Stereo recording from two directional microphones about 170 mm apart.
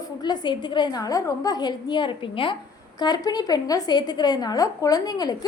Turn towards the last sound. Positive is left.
turn(degrees=25)  # may be behind; listen again after turning